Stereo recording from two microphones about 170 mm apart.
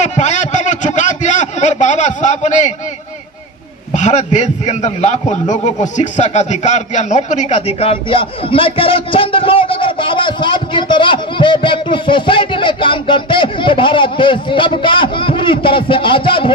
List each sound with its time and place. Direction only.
0.0 s a sound: 45° left (ahead or behind)
3.9 s a man's voice: 45° left (ahead or behind)
7.8 s a man's voice: 35° left (ahead or behind)